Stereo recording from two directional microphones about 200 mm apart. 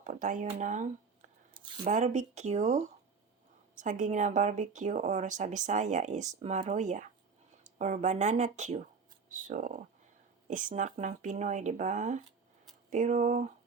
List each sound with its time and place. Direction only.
0.0 s a woman's voice: 40° right (ahead or behind)
1.5 s a sound: 25° right (ahead or behind)
1.8 s a woman's voice: 35° right (ahead or behind)